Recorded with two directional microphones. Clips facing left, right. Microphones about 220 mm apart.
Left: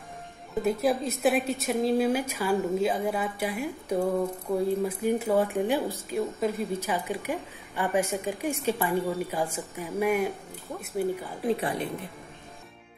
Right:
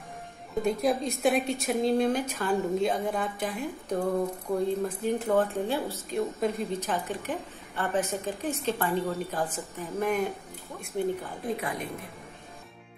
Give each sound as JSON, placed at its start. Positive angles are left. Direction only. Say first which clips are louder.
{"t": 0.6, "sound": "a woman's voice", "louder": "left 1 dB", "side_deg": 5}
{"t": 11.4, "sound": "a woman's voice", "louder": "left 5 dB", "side_deg": 30}